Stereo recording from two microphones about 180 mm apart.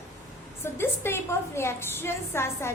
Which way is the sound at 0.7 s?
15° left (ahead or behind).